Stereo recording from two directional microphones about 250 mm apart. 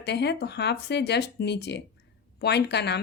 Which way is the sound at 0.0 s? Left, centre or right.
Left.